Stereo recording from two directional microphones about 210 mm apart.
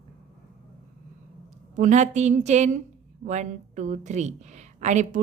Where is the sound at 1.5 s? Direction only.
35° right (ahead or behind).